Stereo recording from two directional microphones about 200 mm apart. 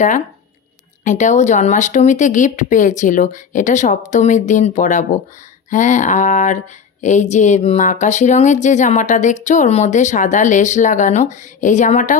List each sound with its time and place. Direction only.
1.0 s speech: 40° left (ahead or behind)